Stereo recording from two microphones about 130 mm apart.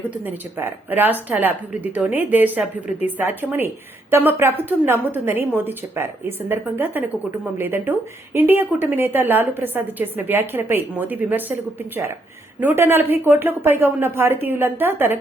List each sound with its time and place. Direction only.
0.1 s a woman's voice: 15° right (ahead or behind)